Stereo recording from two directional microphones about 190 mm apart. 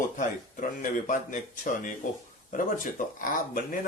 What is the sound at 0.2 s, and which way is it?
Speech, 45° left (ahead or behind).